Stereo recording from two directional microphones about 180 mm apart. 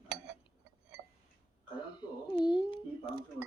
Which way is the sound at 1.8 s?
25° left (ahead or behind).